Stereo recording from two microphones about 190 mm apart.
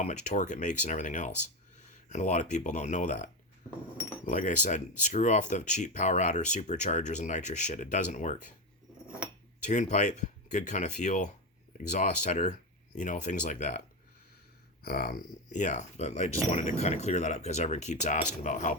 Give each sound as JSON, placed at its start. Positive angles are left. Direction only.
{"t": 0.0, "sound": "speech", "side_deg": 40}
{"t": 4.3, "sound": "speech", "side_deg": 40}
{"t": 9.6, "sound": "speech", "side_deg": 40}
{"t": 14.8, "sound": "speech", "side_deg": 50}